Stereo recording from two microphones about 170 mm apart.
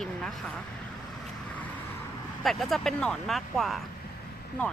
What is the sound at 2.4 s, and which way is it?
Speech, centre (ahead or behind).